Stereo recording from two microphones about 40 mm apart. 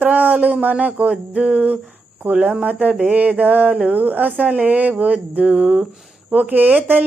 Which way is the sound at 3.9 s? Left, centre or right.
Right.